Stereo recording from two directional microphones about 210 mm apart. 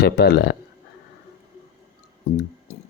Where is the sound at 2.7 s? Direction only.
30° left (ahead or behind).